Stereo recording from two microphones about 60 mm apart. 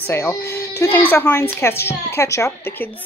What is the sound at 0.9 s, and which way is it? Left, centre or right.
Speech, left.